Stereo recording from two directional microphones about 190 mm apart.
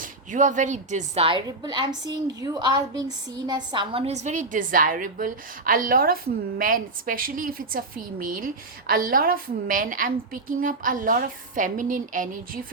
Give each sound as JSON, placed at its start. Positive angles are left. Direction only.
{"t": 0.0, "sound": "a woman's voice", "side_deg": -40}